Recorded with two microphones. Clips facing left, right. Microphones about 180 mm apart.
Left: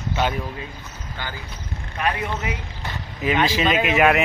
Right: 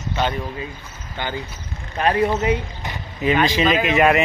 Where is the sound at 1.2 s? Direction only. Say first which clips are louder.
Right 6 dB; 20° right (ahead or behind).